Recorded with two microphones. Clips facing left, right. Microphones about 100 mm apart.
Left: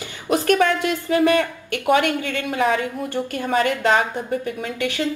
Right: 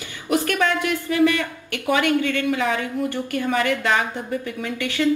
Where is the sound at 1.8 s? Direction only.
20° left (ahead or behind).